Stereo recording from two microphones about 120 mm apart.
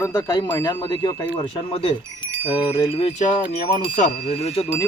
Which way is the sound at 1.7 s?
50° left (ahead or behind).